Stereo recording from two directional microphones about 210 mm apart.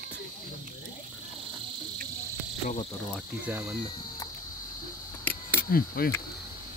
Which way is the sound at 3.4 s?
5° right (ahead or behind).